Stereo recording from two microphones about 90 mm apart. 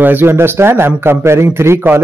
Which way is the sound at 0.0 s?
20° right (ahead or behind).